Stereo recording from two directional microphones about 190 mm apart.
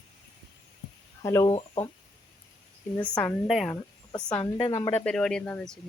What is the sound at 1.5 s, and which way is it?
Speech, 30° left (ahead or behind).